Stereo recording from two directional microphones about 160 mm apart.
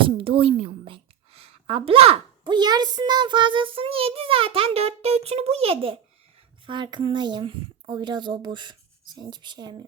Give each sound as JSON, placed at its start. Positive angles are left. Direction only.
{"t": 0.0, "sound": "a woman's voice", "side_deg": -35}